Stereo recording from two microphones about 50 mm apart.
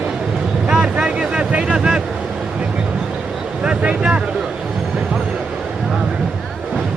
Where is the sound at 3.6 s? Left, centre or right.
Right.